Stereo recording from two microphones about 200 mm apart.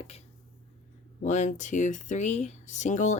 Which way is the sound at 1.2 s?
35° left (ahead or behind).